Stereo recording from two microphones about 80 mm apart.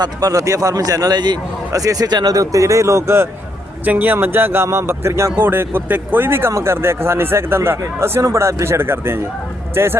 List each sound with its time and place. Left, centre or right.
0.0 s speech: right
1.7 s speech: right
3.8 s speech: right